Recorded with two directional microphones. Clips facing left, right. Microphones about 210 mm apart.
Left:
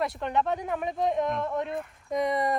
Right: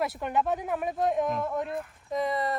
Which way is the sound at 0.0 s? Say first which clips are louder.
Even; 5° right (ahead or behind).